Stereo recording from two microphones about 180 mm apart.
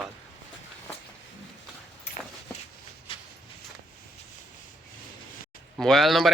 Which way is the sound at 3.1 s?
30° left (ahead or behind).